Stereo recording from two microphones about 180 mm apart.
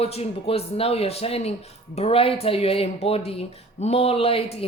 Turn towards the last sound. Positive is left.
turn(degrees=35)  # may be behind; listen again after turning